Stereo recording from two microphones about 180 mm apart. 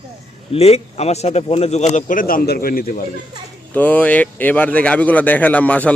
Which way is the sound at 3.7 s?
10° left (ahead or behind).